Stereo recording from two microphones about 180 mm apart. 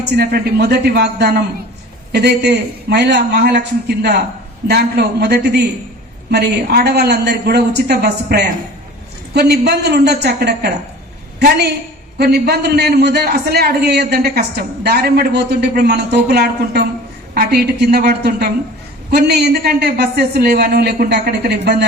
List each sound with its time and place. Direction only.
0.0 s a man's voice: 60° right (ahead or behind)